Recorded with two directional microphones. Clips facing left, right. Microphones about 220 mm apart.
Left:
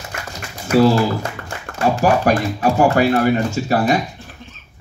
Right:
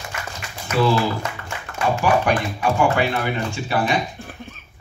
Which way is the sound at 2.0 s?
40° left (ahead or behind).